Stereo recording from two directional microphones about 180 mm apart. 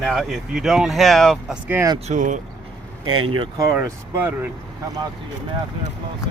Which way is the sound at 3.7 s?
15° right (ahead or behind).